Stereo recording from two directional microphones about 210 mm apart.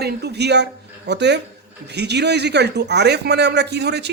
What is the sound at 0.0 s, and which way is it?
Speech, 50° right (ahead or behind).